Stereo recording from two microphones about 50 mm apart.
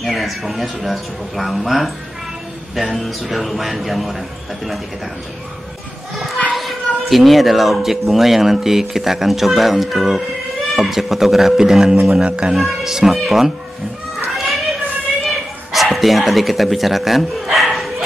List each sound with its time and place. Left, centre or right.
0.0 s speech: centre
6.1 s children playing: centre
6.5 s speech: centre; by 12.5 s right
12.5 s speech: centre
14.2 s a sound: centre
15.7 s speech: centre